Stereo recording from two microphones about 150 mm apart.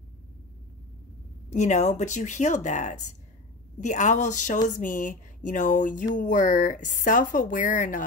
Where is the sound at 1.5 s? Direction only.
50° left (ahead or behind).